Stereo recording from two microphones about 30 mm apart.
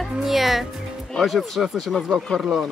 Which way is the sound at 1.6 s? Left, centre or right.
Centre.